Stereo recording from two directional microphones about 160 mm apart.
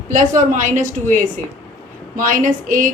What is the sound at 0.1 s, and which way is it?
A woman's voice, 50° right (ahead or behind).